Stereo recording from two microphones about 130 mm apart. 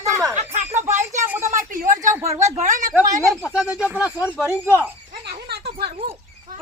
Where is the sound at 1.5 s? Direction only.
85° right.